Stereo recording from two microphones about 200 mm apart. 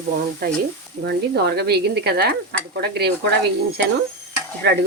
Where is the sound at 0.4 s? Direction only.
50° right (ahead or behind).